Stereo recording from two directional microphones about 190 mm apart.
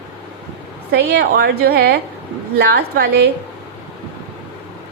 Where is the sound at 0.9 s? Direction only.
55° right (ahead or behind).